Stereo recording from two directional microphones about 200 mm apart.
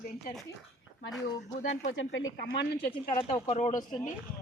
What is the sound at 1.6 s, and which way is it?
Speech, 40° left (ahead or behind).